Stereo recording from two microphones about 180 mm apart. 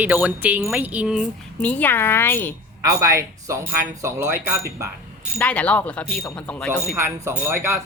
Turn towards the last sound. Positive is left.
turn(degrees=-15)  # may be behind; listen again after turning